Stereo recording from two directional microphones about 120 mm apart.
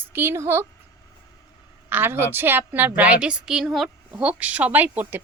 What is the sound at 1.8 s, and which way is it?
A woman's voice, 15° right (ahead or behind).